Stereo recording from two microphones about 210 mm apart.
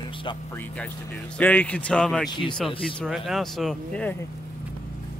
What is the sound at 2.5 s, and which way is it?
Speech, centre (ahead or behind).